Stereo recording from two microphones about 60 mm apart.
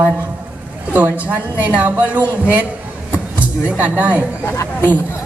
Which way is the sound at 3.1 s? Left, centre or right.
Right.